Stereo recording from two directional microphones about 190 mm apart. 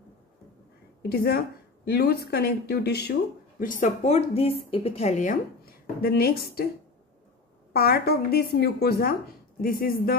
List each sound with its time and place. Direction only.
1.0 s speech: 55° left (ahead or behind)
5.9 s speech: 55° left (ahead or behind)
7.7 s speech: 55° left (ahead or behind)